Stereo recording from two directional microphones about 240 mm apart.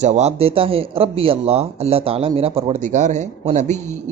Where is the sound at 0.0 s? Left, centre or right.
Right.